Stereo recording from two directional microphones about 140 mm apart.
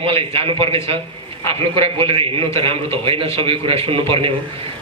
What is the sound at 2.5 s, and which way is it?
A man's voice, 40° right (ahead or behind).